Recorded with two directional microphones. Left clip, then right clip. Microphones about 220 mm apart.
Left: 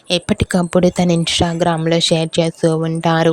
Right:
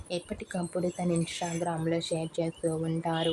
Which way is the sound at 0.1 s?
45° left (ahead or behind).